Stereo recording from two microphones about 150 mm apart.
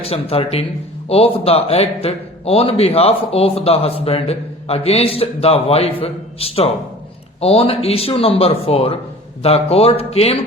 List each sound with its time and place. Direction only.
0.0 s a man's voice: 40° left (ahead or behind)